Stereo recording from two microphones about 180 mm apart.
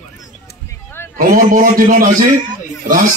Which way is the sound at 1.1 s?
50° right (ahead or behind).